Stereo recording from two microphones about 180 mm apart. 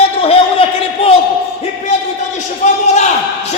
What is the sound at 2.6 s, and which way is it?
Speech, 40° left (ahead or behind).